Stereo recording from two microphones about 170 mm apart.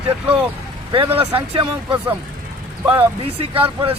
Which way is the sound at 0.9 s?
35° right (ahead or behind).